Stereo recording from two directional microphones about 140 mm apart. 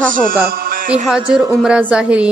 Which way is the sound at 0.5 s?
90° right.